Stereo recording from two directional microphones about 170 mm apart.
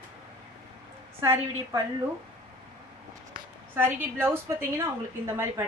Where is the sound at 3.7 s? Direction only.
15° right (ahead or behind).